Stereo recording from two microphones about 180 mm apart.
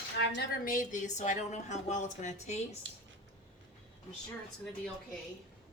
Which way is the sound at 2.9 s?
90° right.